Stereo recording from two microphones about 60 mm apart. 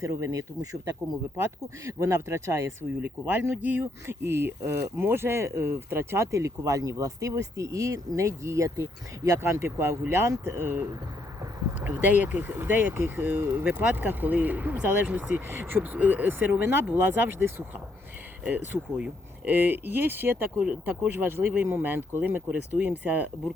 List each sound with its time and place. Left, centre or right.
0.0 s speech: right
1.8 s speech: right
3.0 s speech: right
6.3 s speech: right
15.4 s speech: right
20.7 s speech: right